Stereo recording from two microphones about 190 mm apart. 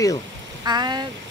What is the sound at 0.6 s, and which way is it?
Speech, 20° right (ahead or behind).